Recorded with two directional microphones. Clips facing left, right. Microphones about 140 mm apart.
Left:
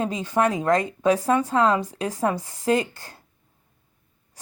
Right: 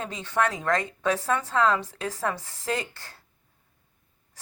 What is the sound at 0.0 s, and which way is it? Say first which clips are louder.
A woman's voice: left 5 dB; 15° left (ahead or behind).